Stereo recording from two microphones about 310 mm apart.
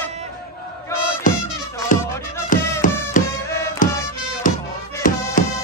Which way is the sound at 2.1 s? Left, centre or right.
Centre.